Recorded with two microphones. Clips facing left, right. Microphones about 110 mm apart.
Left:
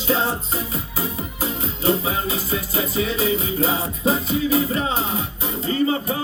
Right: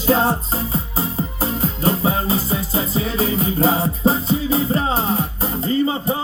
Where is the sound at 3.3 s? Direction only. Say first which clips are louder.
Right 3 dB; 40° right (ahead or behind).